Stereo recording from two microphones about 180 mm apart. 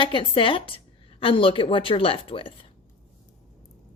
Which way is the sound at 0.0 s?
30° left (ahead or behind).